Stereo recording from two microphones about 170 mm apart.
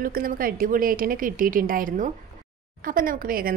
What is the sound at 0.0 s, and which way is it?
A woman's voice, 60° right (ahead or behind).